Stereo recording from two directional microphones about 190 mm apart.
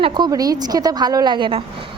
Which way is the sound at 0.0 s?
20° right (ahead or behind).